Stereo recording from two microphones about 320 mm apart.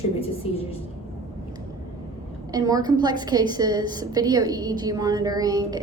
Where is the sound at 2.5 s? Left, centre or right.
Centre.